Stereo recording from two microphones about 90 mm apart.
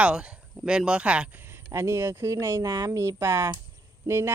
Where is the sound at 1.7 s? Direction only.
30° right (ahead or behind).